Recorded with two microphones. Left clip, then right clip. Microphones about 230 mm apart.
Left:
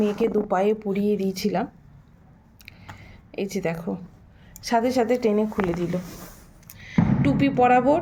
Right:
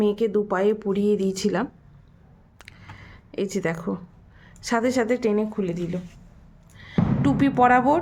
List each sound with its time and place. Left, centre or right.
0.0 s speech: right
2.6 s a sound: right
4.6 s speech: right
6.9 s speech: right